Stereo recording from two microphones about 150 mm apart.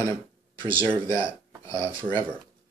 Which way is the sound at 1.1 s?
30° right (ahead or behind).